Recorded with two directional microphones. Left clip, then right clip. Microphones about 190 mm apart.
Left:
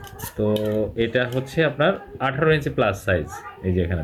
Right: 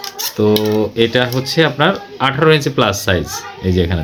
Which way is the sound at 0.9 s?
40° right (ahead or behind).